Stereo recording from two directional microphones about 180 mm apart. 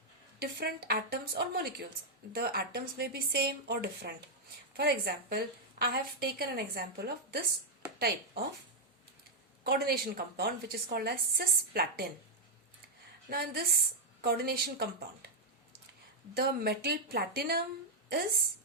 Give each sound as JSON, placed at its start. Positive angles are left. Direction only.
{"t": 0.3, "sound": "a woman's voice", "side_deg": -60}
{"t": 9.6, "sound": "a woman's voice", "side_deg": -60}
{"t": 13.3, "sound": "a woman's voice", "side_deg": -60}
{"t": 16.3, "sound": "a woman's voice", "side_deg": -60}